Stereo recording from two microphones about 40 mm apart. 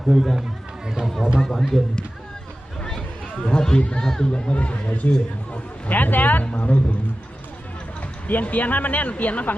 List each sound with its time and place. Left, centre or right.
0.0 s speech: centre
1.4 s speech: centre
3.4 s speech: centre
4.3 s speech: left
5.9 s speech: left
8.3 s speech: left